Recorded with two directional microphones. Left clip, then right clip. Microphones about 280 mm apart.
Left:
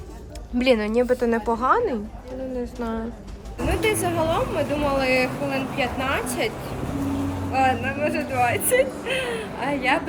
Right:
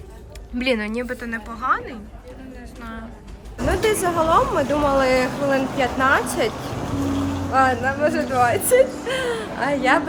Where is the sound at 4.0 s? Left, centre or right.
Centre.